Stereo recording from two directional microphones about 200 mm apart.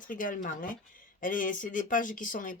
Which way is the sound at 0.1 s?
40° left (ahead or behind).